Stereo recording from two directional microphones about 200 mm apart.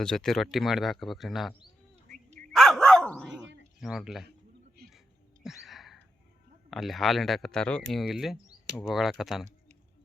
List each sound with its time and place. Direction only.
0.0 s speech: 5° left (ahead or behind)
2.0 s a sound: 40° right (ahead or behind)
2.5 s dog: centre (ahead or behind)
3.8 s speech: centre (ahead or behind)
4.9 s a sound: centre (ahead or behind)
6.7 s speech: centre (ahead or behind)